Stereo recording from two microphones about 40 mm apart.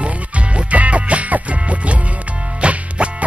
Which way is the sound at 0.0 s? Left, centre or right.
Right.